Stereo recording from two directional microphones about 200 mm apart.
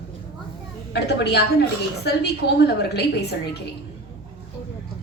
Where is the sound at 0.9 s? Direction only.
55° left (ahead or behind).